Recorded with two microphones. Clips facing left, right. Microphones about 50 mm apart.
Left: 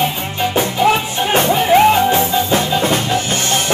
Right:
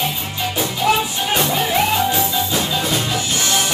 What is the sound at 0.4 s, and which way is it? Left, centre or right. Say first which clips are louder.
Music: left 6 dB; left.